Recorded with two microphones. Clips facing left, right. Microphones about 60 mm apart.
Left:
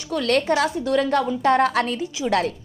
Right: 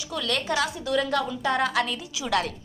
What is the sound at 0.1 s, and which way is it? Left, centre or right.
A woman's voice, left.